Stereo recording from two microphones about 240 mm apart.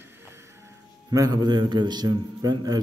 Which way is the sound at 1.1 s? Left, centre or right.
Centre.